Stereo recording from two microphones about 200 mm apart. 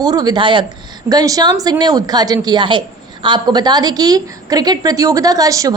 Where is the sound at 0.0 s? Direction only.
20° right (ahead or behind).